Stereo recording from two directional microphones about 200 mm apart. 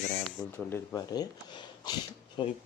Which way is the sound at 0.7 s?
20° left (ahead or behind).